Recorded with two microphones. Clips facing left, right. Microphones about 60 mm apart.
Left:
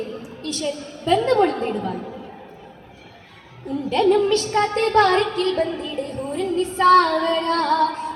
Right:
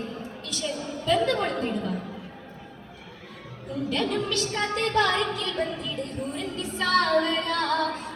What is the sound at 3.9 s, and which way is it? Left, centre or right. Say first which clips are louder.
A woman's voice: left 11 dB; left.